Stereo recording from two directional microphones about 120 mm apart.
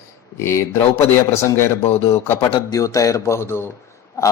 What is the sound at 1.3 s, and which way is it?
A man's voice, 25° left (ahead or behind).